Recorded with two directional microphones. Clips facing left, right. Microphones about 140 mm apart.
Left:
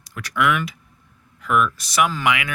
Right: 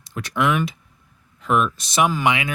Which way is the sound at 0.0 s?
25° right (ahead or behind).